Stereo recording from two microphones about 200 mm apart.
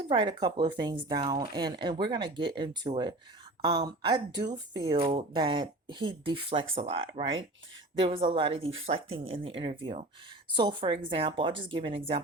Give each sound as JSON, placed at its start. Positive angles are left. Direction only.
{"t": 0.1, "sound": "speech", "side_deg": -25}